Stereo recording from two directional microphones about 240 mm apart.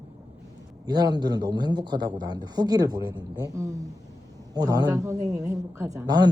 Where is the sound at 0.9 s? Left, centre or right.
Centre.